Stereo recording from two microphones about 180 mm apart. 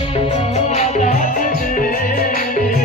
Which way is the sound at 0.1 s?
35° left (ahead or behind).